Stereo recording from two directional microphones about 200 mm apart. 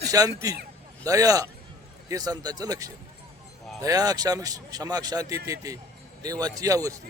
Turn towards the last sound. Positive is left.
turn(degrees=-15)  # may be behind; listen again after turning